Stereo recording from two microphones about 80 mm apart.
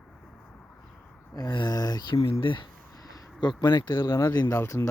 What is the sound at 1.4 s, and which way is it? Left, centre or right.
Speech, left.